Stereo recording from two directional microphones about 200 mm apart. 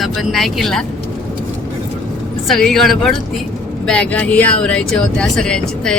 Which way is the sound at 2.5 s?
Centre (ahead or behind).